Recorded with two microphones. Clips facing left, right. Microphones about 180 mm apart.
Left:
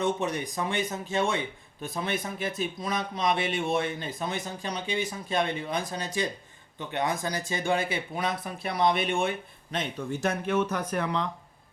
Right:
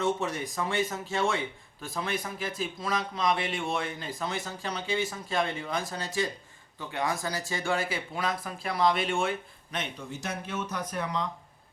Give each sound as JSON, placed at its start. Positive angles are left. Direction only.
{"t": 0.0, "sound": "speech", "side_deg": 20}
{"t": 10.1, "sound": "speech", "side_deg": 60}